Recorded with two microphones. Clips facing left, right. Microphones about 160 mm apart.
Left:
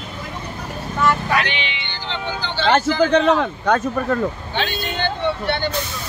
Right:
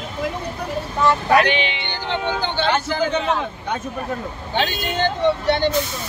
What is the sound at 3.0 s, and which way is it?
A man's voice, 80° left.